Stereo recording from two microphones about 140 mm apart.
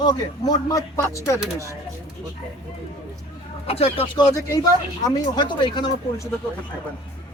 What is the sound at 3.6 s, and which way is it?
Speech, 45° left (ahead or behind).